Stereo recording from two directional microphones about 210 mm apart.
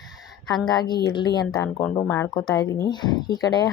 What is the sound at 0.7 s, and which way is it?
A woman's voice, 20° left (ahead or behind).